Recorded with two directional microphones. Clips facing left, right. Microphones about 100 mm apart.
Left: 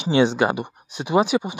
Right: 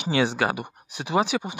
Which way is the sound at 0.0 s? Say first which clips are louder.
Left 5 dB; 20° left (ahead or behind).